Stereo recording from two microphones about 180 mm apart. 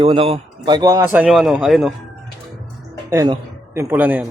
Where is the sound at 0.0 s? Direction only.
30° right (ahead or behind).